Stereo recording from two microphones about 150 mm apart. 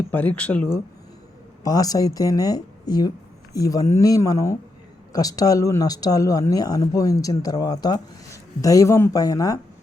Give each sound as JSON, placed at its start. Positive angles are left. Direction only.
{"t": 0.1, "sound": "speech", "side_deg": 10}
{"t": 1.6, "sound": "speech", "side_deg": 25}